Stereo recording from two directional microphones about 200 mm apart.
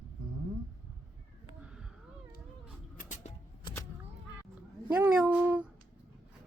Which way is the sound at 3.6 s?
20° left (ahead or behind).